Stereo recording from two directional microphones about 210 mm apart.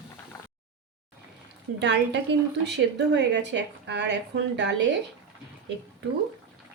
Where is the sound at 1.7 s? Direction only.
55° right (ahead or behind).